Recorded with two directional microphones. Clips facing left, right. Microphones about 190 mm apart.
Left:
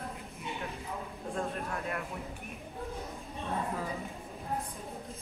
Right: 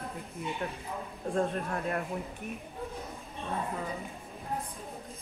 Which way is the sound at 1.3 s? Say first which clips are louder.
Right 5 dB; 35° right (ahead or behind).